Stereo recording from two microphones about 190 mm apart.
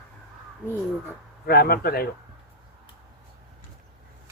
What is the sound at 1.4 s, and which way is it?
Speech, 55° left (ahead or behind).